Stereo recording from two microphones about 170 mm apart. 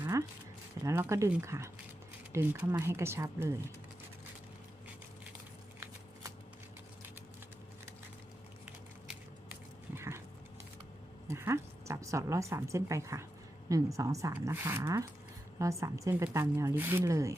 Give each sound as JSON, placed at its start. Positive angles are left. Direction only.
{"t": 0.0, "sound": "a sound", "side_deg": -15}
{"t": 0.9, "sound": "a woman's voice", "side_deg": -15}
{"t": 9.9, "sound": "dog", "side_deg": -15}
{"t": 11.3, "sound": "a woman's voice", "side_deg": -15}